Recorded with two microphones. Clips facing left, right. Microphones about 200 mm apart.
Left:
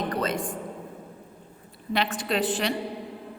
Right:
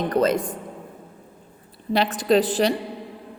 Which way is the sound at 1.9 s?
35° right (ahead or behind).